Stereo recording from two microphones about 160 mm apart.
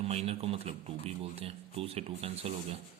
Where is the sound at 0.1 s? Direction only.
40° right (ahead or behind).